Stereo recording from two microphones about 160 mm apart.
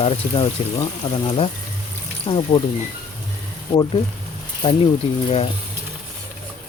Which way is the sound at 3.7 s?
30° left (ahead or behind).